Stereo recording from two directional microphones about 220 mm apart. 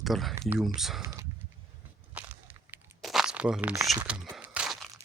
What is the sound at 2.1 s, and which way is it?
Crumpling, 5° right (ahead or behind).